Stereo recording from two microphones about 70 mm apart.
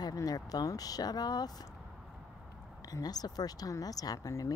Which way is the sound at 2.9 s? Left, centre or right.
Left.